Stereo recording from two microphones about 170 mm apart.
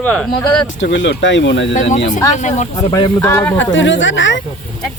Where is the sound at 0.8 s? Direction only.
90° left.